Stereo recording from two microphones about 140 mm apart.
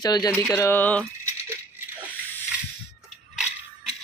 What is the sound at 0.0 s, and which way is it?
Speech, 30° left (ahead or behind).